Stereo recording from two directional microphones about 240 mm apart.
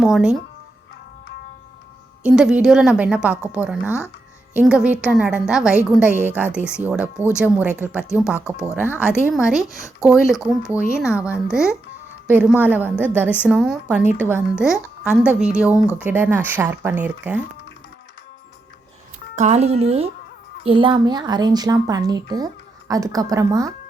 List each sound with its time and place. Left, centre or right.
0.0 s a woman's voice: centre
2.2 s a woman's voice: centre
19.4 s speech: right